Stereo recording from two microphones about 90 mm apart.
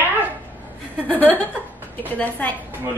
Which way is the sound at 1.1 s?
20° left (ahead or behind).